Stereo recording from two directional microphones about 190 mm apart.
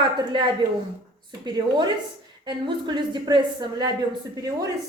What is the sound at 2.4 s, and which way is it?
A woman's voice, 25° right (ahead or behind).